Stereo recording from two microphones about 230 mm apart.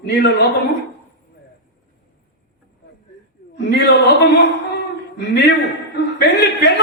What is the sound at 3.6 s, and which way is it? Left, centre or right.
Speech, left.